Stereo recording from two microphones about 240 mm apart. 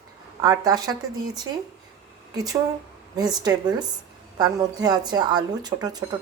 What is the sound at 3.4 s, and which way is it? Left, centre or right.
Speech, centre.